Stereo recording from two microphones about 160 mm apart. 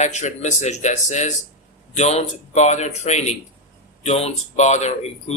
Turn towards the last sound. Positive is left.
turn(degrees=45)  # may be behind; listen again after turning